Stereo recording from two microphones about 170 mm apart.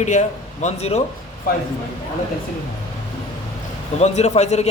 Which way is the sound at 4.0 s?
40° left (ahead or behind).